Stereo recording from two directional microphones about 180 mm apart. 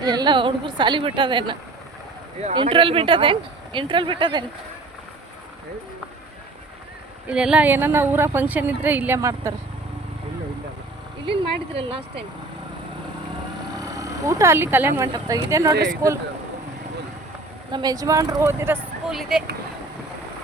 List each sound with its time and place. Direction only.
0.0 s speech: 25° right (ahead or behind)
7.3 s speech: 5° right (ahead or behind)
11.3 s speech: 30° right (ahead or behind)
14.0 s speech: 15° right (ahead or behind)
17.7 s speech: 25° right (ahead or behind)